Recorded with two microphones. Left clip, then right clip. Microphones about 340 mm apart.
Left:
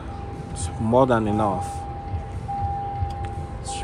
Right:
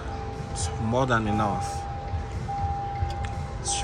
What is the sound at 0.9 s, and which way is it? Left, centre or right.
Speech, centre.